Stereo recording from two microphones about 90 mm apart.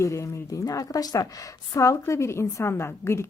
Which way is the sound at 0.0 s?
35° left (ahead or behind).